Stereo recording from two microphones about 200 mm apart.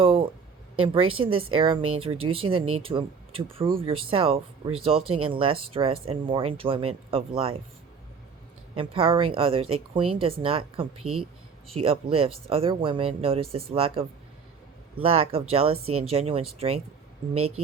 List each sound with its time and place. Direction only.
0.0 s a sound: 25° right (ahead or behind)
1.1 s speech: 25° right (ahead or behind)
8.7 s speech: 25° right (ahead or behind)
11.0 s speech: 90° right
11.7 s speech: 30° right (ahead or behind)
15.0 s speech: 30° right (ahead or behind)